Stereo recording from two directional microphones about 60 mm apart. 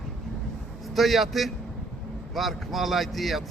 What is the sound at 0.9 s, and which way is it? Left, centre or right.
Speech, centre.